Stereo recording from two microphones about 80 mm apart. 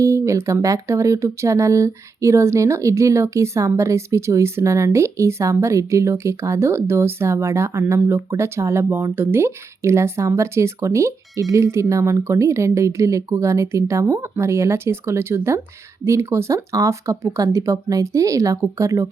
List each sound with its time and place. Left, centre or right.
0.0 s speech: right